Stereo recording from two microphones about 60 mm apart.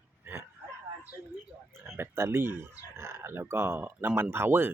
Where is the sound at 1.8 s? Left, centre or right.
Right.